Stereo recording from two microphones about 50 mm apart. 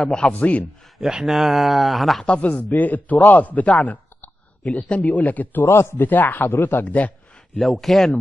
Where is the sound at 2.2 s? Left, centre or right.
Left.